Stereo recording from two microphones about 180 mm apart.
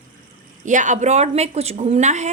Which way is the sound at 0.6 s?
45° right (ahead or behind).